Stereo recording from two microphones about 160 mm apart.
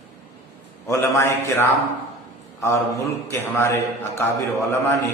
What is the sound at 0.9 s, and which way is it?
A man's voice, 15° left (ahead or behind).